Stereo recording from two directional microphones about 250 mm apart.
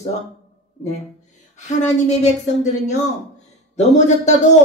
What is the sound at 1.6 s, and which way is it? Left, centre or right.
Speech, left.